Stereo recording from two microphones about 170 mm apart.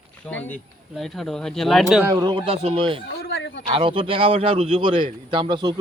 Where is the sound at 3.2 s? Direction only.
90° left.